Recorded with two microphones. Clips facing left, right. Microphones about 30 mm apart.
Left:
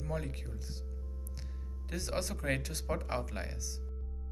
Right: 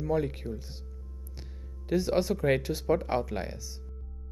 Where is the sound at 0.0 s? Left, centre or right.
Centre.